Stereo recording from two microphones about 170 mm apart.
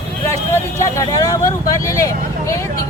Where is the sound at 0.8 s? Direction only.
20° left (ahead or behind).